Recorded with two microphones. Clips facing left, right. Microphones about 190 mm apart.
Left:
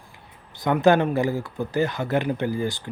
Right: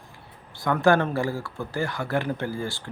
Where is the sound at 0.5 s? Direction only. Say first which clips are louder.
Left 2 dB; 20° left (ahead or behind).